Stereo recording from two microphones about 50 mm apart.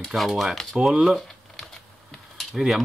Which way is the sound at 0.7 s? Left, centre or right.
Centre.